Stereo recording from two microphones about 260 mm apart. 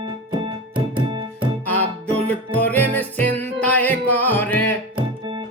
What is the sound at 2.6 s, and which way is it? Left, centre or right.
Music, centre.